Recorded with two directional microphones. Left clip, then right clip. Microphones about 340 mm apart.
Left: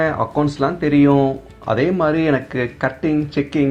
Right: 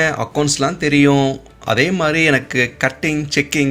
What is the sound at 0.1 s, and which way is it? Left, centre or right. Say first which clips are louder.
Speech: even; right.